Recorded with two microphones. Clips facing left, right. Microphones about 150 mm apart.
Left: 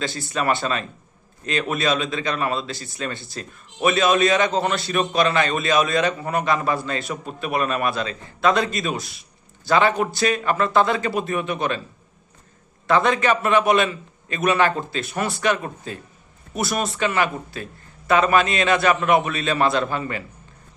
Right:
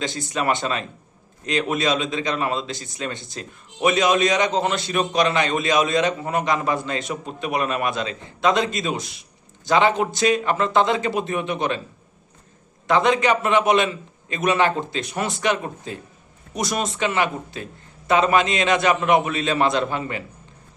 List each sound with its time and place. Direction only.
0.0 s a man's voice: 20° right (ahead or behind)
12.9 s a man's voice: 20° right (ahead or behind)